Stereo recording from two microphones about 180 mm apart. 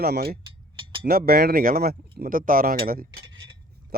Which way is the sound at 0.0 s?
60° right (ahead or behind).